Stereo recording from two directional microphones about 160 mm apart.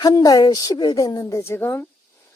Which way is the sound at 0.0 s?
25° left (ahead or behind).